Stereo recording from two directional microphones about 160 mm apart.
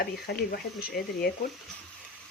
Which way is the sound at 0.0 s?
80° left.